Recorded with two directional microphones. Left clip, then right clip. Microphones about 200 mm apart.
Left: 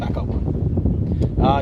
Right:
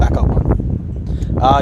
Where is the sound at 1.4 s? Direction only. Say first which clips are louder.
Right 7 dB; 35° right (ahead or behind).